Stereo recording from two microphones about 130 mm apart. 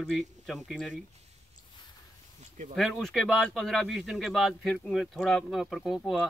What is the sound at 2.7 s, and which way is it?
Speech, centre (ahead or behind).